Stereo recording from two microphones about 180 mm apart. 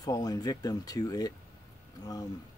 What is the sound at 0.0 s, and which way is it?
Speech, 20° left (ahead or behind).